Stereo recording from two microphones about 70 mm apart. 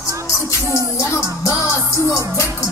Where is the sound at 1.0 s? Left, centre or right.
Left.